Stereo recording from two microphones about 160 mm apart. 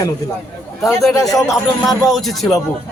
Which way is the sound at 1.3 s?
Centre (ahead or behind).